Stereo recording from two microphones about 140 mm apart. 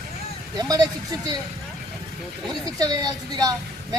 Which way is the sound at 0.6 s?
25° right (ahead or behind).